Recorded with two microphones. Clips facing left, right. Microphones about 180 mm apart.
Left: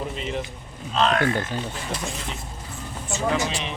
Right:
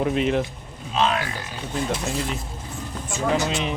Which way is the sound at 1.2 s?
50° left (ahead or behind).